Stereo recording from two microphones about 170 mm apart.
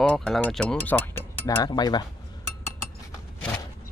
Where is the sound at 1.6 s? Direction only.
25° left (ahead or behind).